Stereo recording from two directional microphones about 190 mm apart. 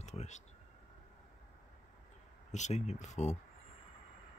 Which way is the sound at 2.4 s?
40° left (ahead or behind).